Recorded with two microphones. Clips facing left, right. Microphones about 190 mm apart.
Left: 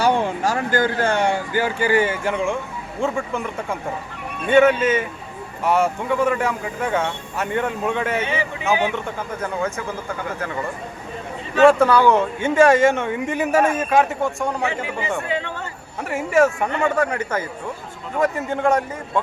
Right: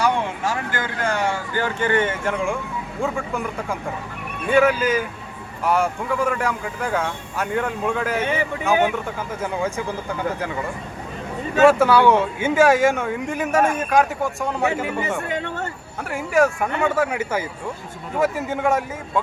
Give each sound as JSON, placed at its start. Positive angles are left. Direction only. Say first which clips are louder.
{"t": 0.0, "sound": "speech", "louder": "left 3 dB", "side_deg": 35}
{"t": 1.5, "sound": "speech", "louder": "left 1 dB", "side_deg": 10}
{"t": 8.2, "sound": "speech", "louder": "right 1 dB", "side_deg": -55}
{"t": 9.4, "sound": "speech", "louder": "right 1 dB", "side_deg": -10}
{"t": 11.6, "sound": "speech", "louder": "left 1 dB", "side_deg": -5}
{"t": 14.7, "sound": "speech", "louder": "right 2 dB", "side_deg": -45}
{"t": 16.0, "sound": "speech", "louder": "left 2 dB", "side_deg": 0}